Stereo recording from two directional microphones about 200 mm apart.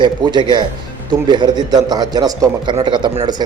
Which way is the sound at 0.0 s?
20° right (ahead or behind).